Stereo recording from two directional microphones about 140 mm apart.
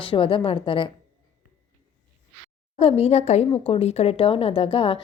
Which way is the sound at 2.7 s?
45° left (ahead or behind).